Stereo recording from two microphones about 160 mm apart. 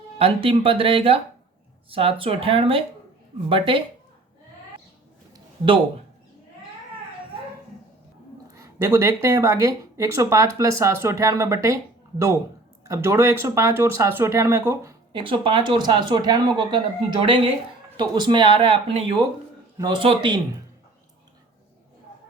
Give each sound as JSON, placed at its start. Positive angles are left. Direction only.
{"t": 0.2, "sound": "speech", "side_deg": -35}
{"t": 8.5, "sound": "speech", "side_deg": -20}
{"t": 12.8, "sound": "speech", "side_deg": -20}
{"t": 15.2, "sound": "speech", "side_deg": -30}
{"t": 19.7, "sound": "speech", "side_deg": -25}